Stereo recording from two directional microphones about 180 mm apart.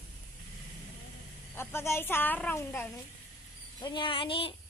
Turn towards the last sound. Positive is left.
turn(degrees=30)  # may be behind; listen again after turning